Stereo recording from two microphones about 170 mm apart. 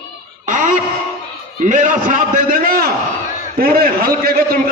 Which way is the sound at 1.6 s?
50° right (ahead or behind).